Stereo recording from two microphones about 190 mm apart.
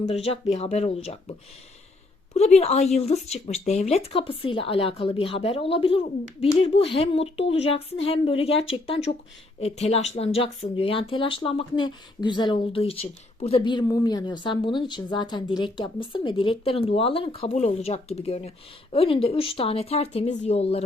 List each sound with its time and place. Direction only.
0.1 s speech: 30° left (ahead or behind)